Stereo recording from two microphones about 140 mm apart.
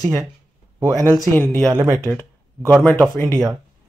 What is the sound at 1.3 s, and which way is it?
Speech, 15° left (ahead or behind).